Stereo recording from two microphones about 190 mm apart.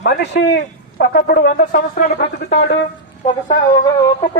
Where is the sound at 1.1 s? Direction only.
55° left (ahead or behind).